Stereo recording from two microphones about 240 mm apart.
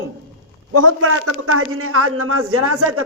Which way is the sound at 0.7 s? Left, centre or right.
Right.